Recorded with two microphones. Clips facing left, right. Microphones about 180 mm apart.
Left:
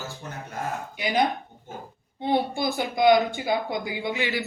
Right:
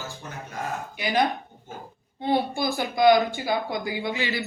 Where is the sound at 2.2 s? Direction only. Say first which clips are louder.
Even; 20° left (ahead or behind).